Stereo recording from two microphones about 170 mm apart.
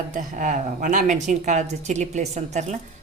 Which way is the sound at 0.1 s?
50° right (ahead or behind).